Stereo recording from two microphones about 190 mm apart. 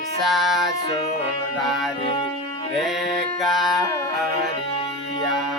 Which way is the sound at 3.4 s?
Centre (ahead or behind).